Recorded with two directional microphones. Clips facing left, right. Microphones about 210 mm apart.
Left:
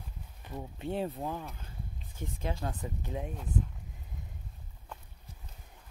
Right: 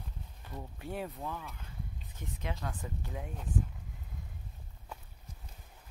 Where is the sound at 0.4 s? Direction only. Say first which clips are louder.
Left 5 dB; 20° left (ahead or behind).